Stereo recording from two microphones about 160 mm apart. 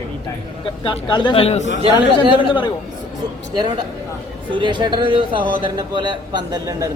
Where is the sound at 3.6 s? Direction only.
30° right (ahead or behind).